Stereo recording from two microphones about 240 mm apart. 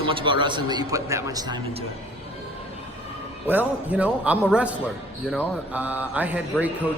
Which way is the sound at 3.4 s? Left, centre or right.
Centre.